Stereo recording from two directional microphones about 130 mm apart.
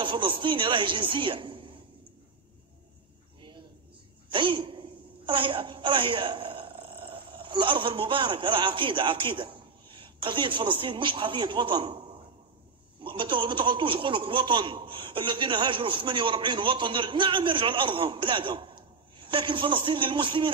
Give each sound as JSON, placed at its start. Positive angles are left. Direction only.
{"t": 0.0, "sound": "a man's voice", "side_deg": -40}
{"t": 3.3, "sound": "a sound", "side_deg": -35}
{"t": 4.3, "sound": "a woman's voice", "side_deg": -40}